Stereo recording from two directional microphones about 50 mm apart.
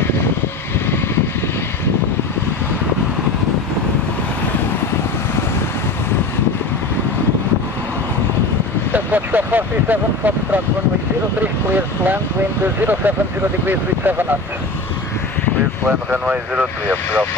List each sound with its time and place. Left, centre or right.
8.9 s speech: right
11.7 s speech: right